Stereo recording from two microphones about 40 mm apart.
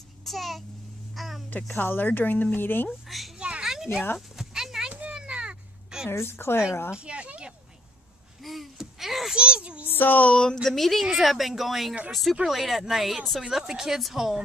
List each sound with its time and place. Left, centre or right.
0.2 s a child's voice: centre
1.8 s speech: left
3.3 s children playing: right
3.6 s a sound: centre
5.1 s a sound: right
6.0 s a woman's voice: left
7.1 s a sound: right
8.7 s a sound: centre
9.3 s a child's voice: right
9.8 s speech: left
10.3 s speech: left
10.6 s a woman's voice: centre